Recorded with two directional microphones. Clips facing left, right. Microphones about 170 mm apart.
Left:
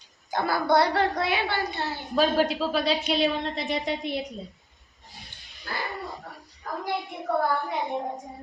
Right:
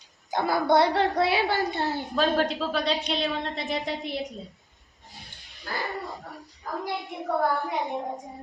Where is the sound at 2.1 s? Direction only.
10° left (ahead or behind).